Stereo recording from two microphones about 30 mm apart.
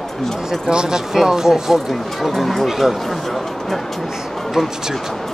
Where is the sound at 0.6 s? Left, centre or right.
Right.